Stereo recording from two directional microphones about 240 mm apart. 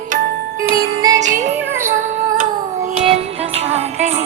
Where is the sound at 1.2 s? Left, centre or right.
Right.